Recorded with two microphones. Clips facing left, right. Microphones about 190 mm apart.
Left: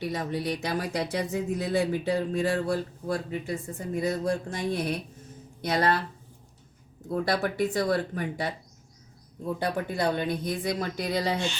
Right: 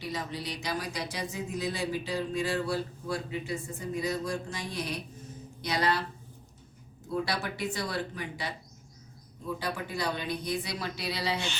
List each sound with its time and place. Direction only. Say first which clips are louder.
0.0 s speech: left 6 dB; 55° left (ahead or behind)
7.1 s speech: left 5 dB; 50° left (ahead or behind)
9.6 s speech: left 7 dB; 55° left (ahead or behind)